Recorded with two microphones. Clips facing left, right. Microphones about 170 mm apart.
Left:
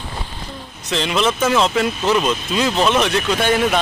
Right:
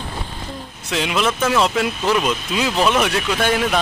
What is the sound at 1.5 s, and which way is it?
Speech, 5° right (ahead or behind).